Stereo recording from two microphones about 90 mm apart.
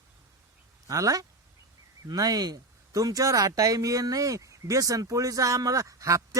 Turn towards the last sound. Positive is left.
turn(degrees=-35)  # may be behind; listen again after turning